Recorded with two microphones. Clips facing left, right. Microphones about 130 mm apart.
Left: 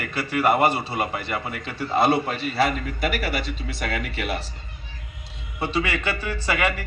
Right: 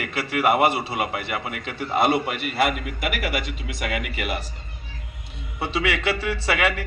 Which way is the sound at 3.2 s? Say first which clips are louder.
Even; 70° right (ahead or behind).